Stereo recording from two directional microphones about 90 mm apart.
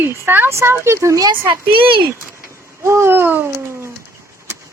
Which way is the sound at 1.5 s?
75° right (ahead or behind).